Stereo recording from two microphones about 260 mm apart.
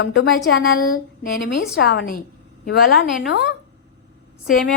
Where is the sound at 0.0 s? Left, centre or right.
Left.